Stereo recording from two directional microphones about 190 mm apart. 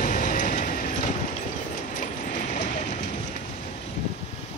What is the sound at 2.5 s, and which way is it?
Clip-clop, 40° left (ahead or behind).